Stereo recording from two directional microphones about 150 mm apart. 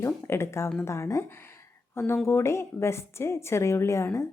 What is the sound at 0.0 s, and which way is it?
A woman's voice, 20° left (ahead or behind).